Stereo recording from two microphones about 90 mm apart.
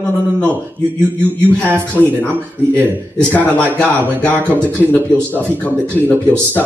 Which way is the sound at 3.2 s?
10° left (ahead or behind).